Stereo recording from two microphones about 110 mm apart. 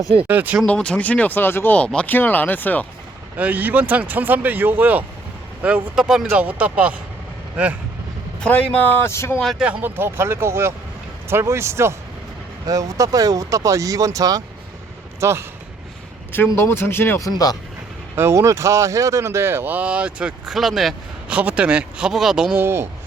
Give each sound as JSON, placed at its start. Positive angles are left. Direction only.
{"t": 0.3, "sound": "speech", "side_deg": -15}
{"t": 0.7, "sound": "speech", "side_deg": 10}
{"t": 3.3, "sound": "speech", "side_deg": -15}
{"t": 8.4, "sound": "speech", "side_deg": 10}
{"t": 9.4, "sound": "speech", "side_deg": 0}
{"t": 9.6, "sound": "speech", "side_deg": -15}
{"t": 16.6, "sound": "speech", "side_deg": 20}
{"t": 18.2, "sound": "speech", "side_deg": -25}
{"t": 22.5, "sound": "speech", "side_deg": -20}